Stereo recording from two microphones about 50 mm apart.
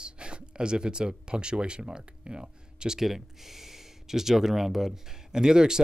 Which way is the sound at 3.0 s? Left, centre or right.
Centre.